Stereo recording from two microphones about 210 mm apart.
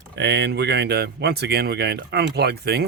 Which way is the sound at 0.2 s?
55° right (ahead or behind).